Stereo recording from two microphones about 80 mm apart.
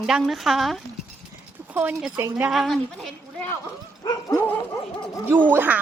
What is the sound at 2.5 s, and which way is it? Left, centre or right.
Speech, centre.